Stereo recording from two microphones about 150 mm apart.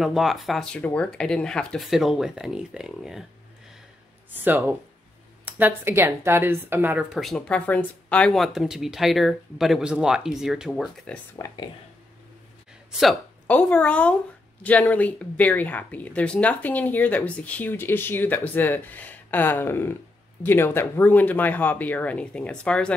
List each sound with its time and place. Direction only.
0.0 s speech: centre (ahead or behind)
4.5 s speech: 15° right (ahead or behind)
7.1 s speech: centre (ahead or behind)
11.3 s speech: 25° left (ahead or behind)
13.0 s speech: 5° left (ahead or behind)